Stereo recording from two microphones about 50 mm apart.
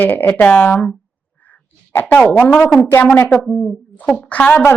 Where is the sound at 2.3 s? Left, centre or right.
Left.